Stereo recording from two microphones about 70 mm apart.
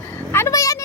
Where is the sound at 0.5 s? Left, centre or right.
Left.